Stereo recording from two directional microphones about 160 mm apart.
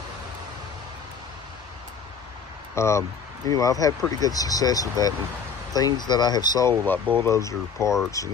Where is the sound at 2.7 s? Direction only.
15° left (ahead or behind).